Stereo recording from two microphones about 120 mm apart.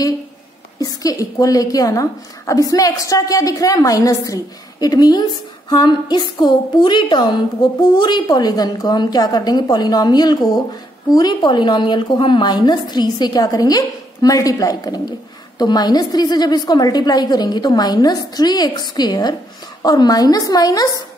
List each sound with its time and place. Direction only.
0.7 s a woman's voice: 30° left (ahead or behind)